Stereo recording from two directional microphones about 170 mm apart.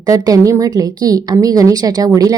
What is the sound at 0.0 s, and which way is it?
Speech, 20° right (ahead or behind).